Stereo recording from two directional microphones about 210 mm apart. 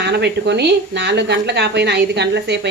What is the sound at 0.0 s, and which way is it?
Speech, 55° right (ahead or behind).